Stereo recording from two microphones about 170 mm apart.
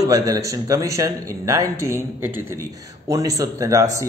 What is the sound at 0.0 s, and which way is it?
A man's voice, 20° right (ahead or behind).